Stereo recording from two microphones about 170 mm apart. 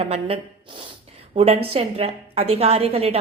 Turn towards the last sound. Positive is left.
turn(degrees=-35)  # may be behind; listen again after turning